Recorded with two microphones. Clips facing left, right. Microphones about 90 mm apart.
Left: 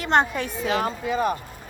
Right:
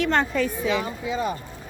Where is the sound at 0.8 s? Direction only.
55° left (ahead or behind).